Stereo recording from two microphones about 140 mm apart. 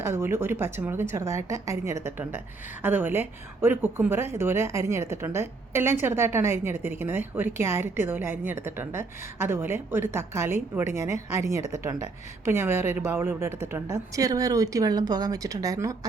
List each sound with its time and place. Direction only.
0.0 s a woman's voice: 20° right (ahead or behind)